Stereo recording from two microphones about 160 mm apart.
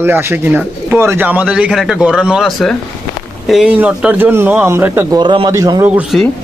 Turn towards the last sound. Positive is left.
turn(degrees=-10)  # may be behind; listen again after turning